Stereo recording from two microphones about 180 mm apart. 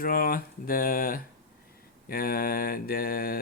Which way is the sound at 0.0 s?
55° left (ahead or behind).